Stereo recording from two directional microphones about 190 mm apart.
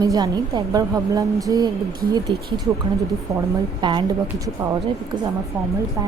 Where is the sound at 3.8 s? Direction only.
25° right (ahead or behind).